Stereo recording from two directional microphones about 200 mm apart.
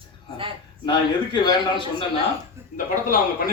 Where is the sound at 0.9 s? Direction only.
25° left (ahead or behind).